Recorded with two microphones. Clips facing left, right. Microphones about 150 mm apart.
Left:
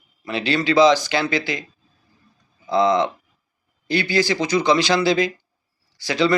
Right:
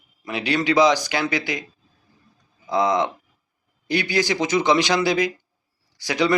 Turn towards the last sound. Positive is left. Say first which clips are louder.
# left 2 dB
turn(degrees=-15)  # may be behind; listen again after turning